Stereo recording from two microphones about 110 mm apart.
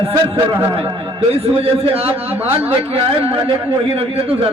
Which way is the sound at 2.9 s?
60° right (ahead or behind).